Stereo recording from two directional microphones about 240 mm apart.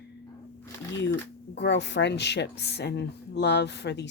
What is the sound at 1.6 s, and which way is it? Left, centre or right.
Speech, left.